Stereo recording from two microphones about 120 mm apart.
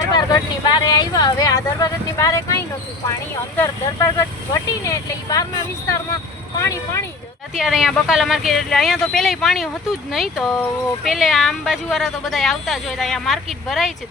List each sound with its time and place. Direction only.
0.1 s speech: 35° left (ahead or behind)
3.6 s speech: 20° left (ahead or behind)
7.5 s speech: 5° right (ahead or behind)